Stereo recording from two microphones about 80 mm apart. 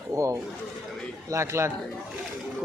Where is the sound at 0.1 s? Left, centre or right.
Right.